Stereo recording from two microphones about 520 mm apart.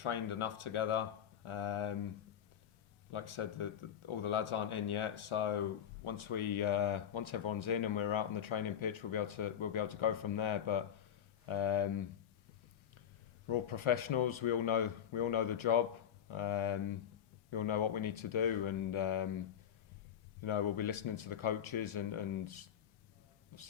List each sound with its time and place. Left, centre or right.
0.0 s speech: left
3.1 s speech: left
13.5 s speech: left
20.4 s speech: left